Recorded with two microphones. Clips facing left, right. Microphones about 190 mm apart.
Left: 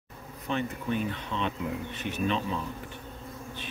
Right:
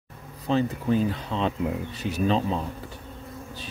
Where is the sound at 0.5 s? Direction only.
30° right (ahead or behind).